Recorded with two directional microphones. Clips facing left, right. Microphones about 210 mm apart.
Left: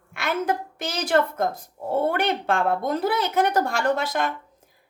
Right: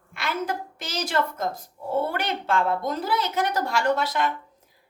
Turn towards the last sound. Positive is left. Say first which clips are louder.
# even
turn(degrees=50)  # may be behind; listen again after turning